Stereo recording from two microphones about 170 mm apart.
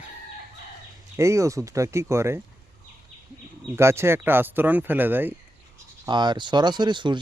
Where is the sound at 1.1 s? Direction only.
15° right (ahead or behind).